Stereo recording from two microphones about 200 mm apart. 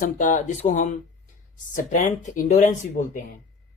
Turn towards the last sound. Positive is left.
turn(degrees=40)  # may be behind; listen again after turning